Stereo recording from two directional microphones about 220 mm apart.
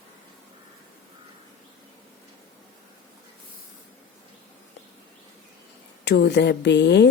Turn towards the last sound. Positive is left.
turn(degrees=50)  # may be behind; listen again after turning